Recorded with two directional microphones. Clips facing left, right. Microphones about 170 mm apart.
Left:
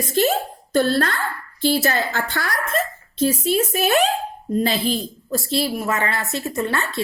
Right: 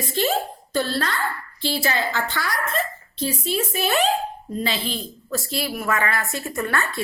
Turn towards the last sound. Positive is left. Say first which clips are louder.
# left 2 dB
turn(degrees=20)  # may be behind; listen again after turning